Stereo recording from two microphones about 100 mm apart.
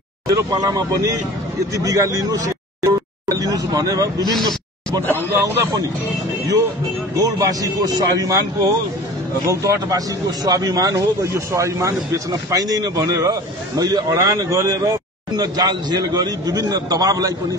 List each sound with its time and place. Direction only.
0.3 s a man's voice: 35° right (ahead or behind)
5.3 s a man's voice: 25° right (ahead or behind)
7.2 s a man's voice: 35° right (ahead or behind)